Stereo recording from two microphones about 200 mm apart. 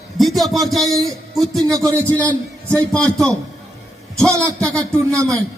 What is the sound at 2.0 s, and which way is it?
A man's voice, 10° left (ahead or behind).